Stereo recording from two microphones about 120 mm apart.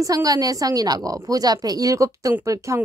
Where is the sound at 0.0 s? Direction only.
30° right (ahead or behind).